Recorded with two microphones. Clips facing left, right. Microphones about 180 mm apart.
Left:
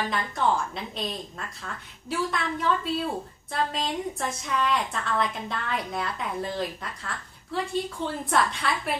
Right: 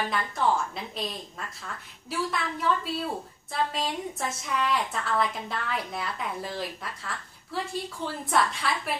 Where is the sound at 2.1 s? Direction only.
Centre (ahead or behind).